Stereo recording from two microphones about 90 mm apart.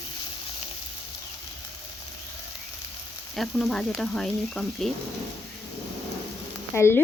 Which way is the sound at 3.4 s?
Centre (ahead or behind).